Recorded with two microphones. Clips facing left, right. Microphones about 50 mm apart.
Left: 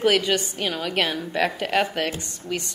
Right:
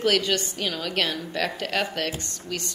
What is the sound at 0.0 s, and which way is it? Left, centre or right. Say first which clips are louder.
A woman's voice: left 3 dB; centre.